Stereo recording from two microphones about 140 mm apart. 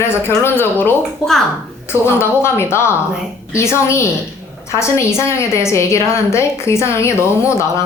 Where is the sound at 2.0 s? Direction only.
15° left (ahead or behind).